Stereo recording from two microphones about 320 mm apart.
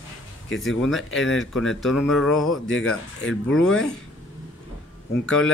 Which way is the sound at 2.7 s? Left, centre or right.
Left.